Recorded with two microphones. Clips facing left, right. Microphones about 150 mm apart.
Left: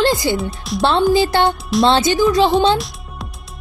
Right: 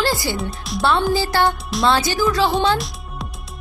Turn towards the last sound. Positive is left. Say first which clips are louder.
# left 1 dB
turn(degrees=0)  # may be behind; listen again after turning